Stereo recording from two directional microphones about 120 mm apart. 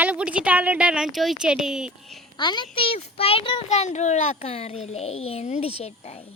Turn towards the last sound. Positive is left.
turn(degrees=60)  # may be behind; listen again after turning